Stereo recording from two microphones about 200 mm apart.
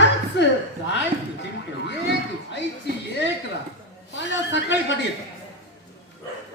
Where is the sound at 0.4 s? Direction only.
60° left (ahead or behind).